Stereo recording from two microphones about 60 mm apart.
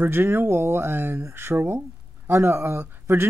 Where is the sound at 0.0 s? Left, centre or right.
Right.